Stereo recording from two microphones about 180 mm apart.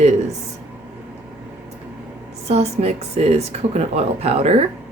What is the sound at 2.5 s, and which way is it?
Speech, 35° right (ahead or behind).